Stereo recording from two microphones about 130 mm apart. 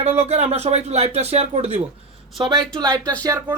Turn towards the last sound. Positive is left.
turn(degrees=-25)  # may be behind; listen again after turning